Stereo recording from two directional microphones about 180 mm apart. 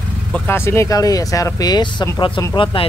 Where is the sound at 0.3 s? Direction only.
10° left (ahead or behind).